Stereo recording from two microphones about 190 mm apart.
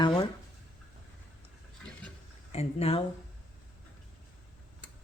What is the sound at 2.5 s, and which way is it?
Speech, 35° left (ahead or behind).